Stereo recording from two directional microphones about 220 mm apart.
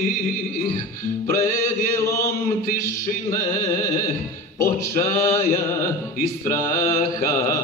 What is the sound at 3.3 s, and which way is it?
Music, 10° left (ahead or behind).